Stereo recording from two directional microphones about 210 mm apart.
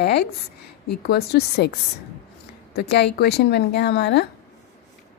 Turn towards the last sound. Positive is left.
turn(degrees=50)  # may be behind; listen again after turning